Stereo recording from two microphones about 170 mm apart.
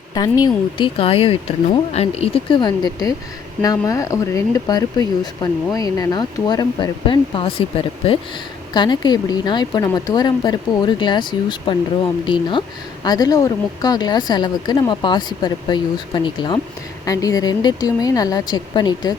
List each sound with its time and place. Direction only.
0.1 s a woman's voice: 20° left (ahead or behind)